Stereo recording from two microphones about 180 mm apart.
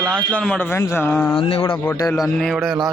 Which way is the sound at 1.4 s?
30° left (ahead or behind).